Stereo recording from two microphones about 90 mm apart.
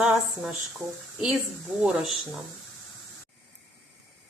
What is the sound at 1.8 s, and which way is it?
Speech, 10° right (ahead or behind).